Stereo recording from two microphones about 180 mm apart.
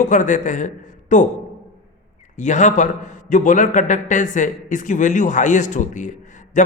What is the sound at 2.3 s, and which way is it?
A man's voice, 40° left (ahead or behind).